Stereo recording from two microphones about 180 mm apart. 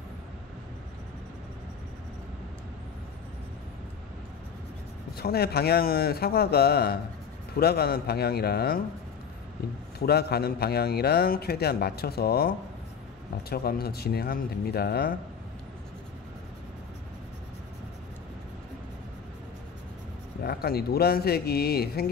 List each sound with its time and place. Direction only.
5.1 s a man's voice: 60° left (ahead or behind)
9.9 s a man's voice: 60° left (ahead or behind)
20.4 s a man's voice: 60° left (ahead or behind)